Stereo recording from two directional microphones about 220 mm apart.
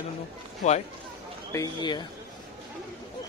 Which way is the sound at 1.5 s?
15° left (ahead or behind).